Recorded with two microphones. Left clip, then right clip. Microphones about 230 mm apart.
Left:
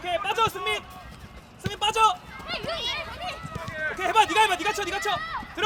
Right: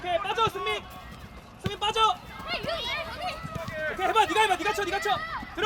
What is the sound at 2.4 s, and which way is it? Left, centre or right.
Clip-clop, centre.